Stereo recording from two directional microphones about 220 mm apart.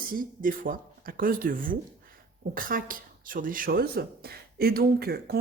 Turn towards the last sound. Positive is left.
turn(degrees=-45)  # may be behind; listen again after turning